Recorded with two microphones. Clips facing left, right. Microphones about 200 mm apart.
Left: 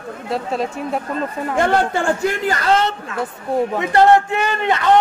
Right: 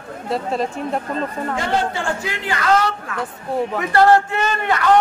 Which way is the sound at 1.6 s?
50° left (ahead or behind).